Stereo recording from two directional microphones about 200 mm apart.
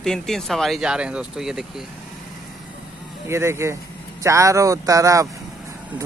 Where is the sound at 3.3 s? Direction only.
15° right (ahead or behind).